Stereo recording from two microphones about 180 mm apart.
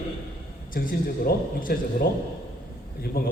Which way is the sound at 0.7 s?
55° left (ahead or behind).